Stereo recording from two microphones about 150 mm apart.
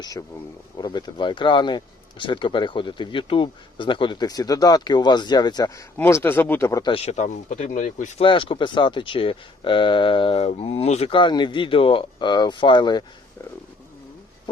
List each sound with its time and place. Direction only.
0.0 s speech: 25° left (ahead or behind)
6.9 s speech: 45° left (ahead or behind)
8.2 s speech: 35° left (ahead or behind)